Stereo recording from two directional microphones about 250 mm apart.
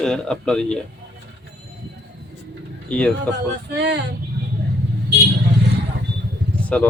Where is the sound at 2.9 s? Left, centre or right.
Centre.